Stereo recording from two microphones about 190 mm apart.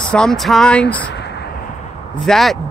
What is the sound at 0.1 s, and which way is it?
Speech, 5° left (ahead or behind).